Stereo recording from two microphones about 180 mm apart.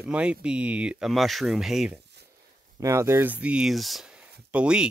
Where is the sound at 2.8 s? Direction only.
15° right (ahead or behind).